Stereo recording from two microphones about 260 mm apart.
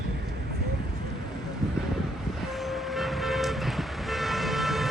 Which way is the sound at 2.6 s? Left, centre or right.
Centre.